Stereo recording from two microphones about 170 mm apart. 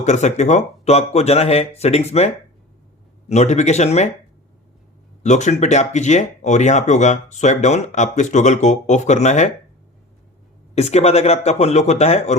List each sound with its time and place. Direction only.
0.0 s speech: 45° left (ahead or behind)
5.2 s speech: 45° left (ahead or behind)
10.8 s speech: 40° left (ahead or behind)